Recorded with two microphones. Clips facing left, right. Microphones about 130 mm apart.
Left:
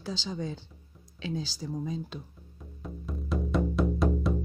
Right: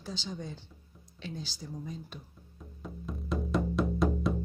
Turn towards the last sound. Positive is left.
turn(degrees=0)  # may be behind; listen again after turning